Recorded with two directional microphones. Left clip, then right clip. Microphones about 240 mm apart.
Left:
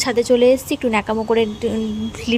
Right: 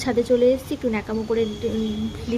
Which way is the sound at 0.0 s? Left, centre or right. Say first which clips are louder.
Left 4 dB; left.